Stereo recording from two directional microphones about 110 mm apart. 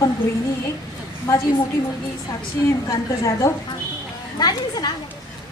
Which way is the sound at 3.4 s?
25° left (ahead or behind).